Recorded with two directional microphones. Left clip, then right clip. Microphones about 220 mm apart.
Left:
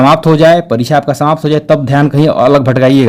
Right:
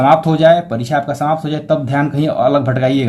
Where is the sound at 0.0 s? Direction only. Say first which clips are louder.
Left 4 dB; 50° left (ahead or behind).